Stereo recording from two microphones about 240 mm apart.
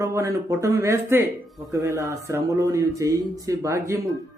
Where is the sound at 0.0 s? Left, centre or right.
Centre.